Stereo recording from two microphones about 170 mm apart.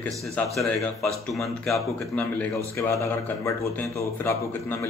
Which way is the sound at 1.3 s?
Centre (ahead or behind).